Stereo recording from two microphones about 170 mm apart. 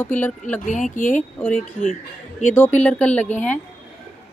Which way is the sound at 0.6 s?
45° left (ahead or behind).